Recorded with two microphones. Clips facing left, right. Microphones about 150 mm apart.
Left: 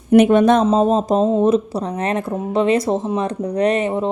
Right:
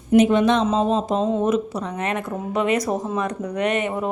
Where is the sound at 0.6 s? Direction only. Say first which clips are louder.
Left 5 dB; 35° left (ahead or behind).